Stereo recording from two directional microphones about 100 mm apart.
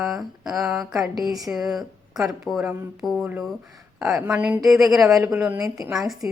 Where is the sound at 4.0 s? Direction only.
5° right (ahead or behind).